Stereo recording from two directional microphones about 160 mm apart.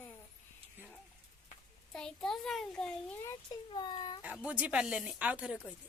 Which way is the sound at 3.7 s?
25° left (ahead or behind).